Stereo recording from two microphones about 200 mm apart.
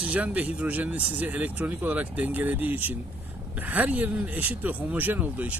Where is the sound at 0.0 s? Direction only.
5° right (ahead or behind).